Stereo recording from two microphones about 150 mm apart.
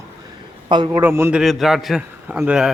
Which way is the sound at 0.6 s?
30° right (ahead or behind).